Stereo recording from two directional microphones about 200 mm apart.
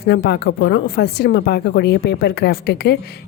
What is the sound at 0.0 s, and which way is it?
Speech, 55° left (ahead or behind).